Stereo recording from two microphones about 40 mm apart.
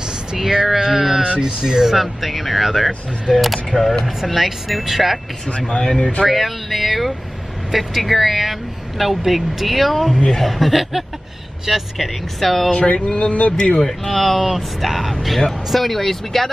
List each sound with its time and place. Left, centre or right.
0.3 s a sound: centre
1.2 s speech: centre
5.7 s speech: left
6.2 s vehicle: centre
7.7 s speech: centre
10.1 s speech: centre
10.4 s speech: centre
12.7 s speech: left
13.7 s speech: centre
14.1 s speech: centre